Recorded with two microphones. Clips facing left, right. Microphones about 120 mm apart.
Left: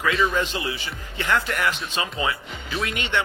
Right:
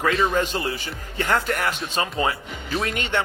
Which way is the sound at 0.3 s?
45° right (ahead or behind).